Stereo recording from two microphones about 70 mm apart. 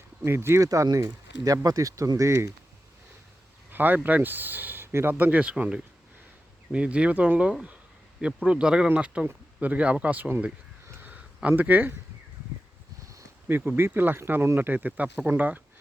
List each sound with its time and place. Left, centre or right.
0.3 s speech: right
0.6 s speech: right
3.7 s speech: right
11.0 s a sound: right
11.4 s speech: right
13.5 s speech: right